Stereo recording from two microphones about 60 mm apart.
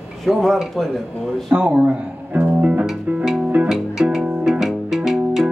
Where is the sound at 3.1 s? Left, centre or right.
Centre.